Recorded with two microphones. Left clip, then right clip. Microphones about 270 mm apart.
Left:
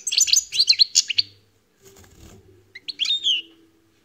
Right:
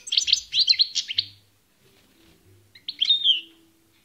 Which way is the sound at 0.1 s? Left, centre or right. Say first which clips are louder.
Left 2 dB; right.